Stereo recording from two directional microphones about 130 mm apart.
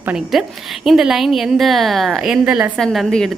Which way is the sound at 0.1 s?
Centre (ahead or behind).